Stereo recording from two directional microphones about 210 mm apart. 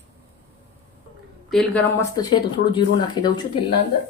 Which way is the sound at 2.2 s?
15° left (ahead or behind).